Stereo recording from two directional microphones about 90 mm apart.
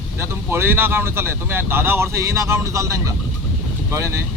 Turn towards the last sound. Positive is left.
turn(degrees=-35)  # may be behind; listen again after turning